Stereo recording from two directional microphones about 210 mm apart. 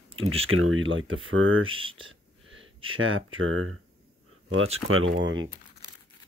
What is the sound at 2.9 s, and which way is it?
Speech, 70° right (ahead or behind).